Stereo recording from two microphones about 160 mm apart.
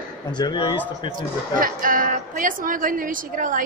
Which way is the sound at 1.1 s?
60° right (ahead or behind).